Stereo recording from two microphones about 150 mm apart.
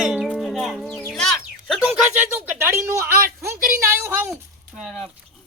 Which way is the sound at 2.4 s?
15° right (ahead or behind).